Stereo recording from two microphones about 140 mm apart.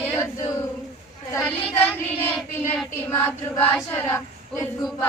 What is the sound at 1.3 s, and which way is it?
Child singing, 20° left (ahead or behind).